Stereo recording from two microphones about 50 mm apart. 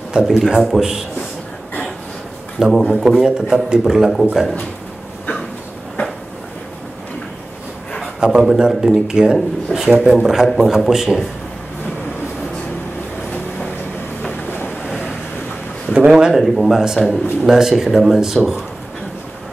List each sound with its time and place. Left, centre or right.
0.1 s speech: centre
2.9 s speech: centre
8.2 s a man's voice: centre
16.1 s speech: centre
16.3 s speech: centre